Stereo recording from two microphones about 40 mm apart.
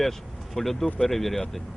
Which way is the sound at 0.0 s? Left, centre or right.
Centre.